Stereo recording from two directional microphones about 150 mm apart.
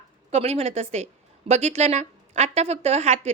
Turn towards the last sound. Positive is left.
turn(degrees=-50)  # may be behind; listen again after turning